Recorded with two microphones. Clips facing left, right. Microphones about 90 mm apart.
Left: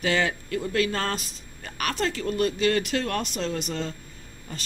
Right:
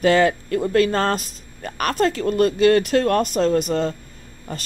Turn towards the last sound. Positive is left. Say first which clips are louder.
# right 6 dB
turn(degrees=-45)  # may be behind; listen again after turning